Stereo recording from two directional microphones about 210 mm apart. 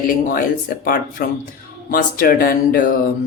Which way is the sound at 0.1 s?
40° left (ahead or behind).